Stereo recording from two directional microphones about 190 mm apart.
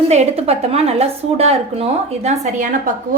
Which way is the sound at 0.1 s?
35° right (ahead or behind).